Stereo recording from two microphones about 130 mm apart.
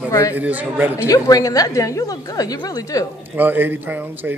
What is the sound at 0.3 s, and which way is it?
Speech, 10° right (ahead or behind).